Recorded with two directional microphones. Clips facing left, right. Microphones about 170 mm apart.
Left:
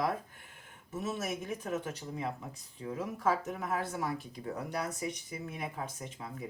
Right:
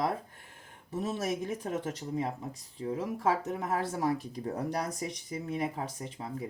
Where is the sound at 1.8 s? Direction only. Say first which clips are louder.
Right 4 dB; 40° right (ahead or behind).